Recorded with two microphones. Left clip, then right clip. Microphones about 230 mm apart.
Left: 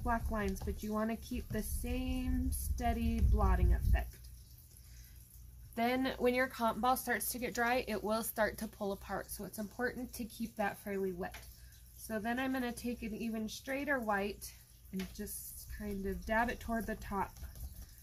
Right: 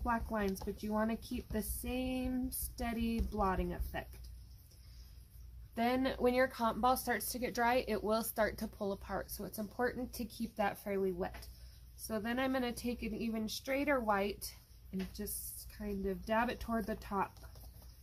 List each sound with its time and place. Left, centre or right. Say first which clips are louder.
0.0 s speech: right 1 dB; centre
5.8 s speech: even; centre
15.8 s speech: right 2 dB; centre